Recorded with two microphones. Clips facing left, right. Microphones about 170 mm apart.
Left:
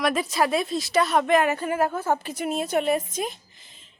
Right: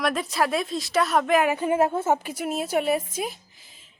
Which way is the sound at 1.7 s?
25° right (ahead or behind).